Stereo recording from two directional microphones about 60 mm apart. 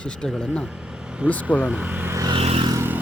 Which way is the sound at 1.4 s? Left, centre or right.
Right.